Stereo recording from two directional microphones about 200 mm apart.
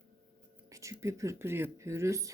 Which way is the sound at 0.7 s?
15° right (ahead or behind).